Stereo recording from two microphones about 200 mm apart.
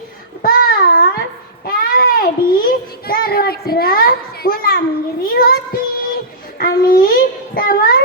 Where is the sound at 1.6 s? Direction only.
45° left (ahead or behind).